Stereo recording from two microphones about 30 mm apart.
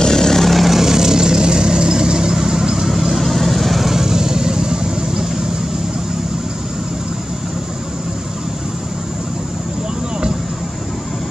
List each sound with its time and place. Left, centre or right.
0.0 s vehicle: centre
0.4 s vehicle: centre
0.7 s vehicle: centre
3.2 s vehicle: centre
3.9 s vehicle: centre